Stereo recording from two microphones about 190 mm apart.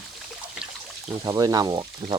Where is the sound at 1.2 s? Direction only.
20° right (ahead or behind).